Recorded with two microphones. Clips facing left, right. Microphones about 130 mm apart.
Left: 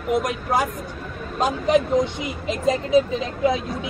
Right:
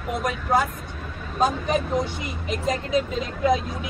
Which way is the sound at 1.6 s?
20° left (ahead or behind).